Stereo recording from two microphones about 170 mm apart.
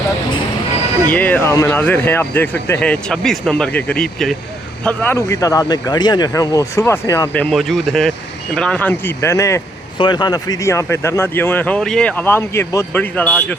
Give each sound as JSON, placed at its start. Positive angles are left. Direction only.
{"t": 1.1, "sound": "speech", "side_deg": 10}
{"t": 7.5, "sound": "speech", "side_deg": 0}